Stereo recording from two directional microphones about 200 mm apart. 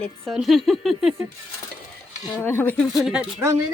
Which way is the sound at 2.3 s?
10° left (ahead or behind).